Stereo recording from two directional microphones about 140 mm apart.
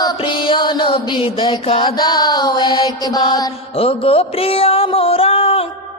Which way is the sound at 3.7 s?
40° left (ahead or behind).